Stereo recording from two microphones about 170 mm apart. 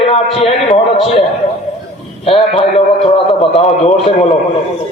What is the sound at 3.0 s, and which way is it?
A man's voice, 35° left (ahead or behind).